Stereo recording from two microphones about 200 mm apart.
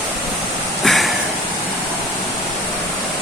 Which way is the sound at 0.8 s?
Centre (ahead or behind).